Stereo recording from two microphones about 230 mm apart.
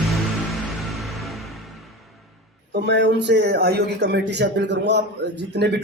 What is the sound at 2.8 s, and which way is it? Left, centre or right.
A man's voice, right.